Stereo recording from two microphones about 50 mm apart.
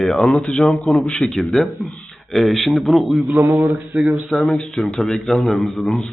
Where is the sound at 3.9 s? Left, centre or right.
Right.